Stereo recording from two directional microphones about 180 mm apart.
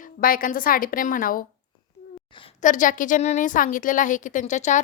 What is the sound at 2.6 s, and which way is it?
A woman's voice, 45° left (ahead or behind).